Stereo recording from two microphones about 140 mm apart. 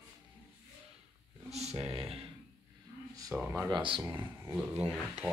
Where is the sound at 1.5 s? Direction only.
50° right (ahead or behind).